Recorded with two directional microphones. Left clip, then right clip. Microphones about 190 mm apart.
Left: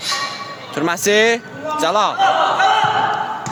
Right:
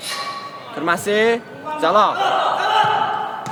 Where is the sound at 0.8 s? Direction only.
30° left (ahead or behind).